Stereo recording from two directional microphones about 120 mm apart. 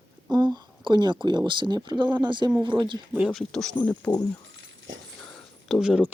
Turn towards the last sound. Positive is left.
turn(degrees=-5)  # may be behind; listen again after turning